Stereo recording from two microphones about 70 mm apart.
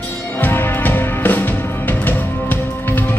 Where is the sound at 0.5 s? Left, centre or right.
Left.